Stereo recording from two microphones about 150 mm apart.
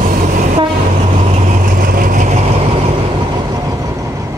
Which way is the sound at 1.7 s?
70° right (ahead or behind).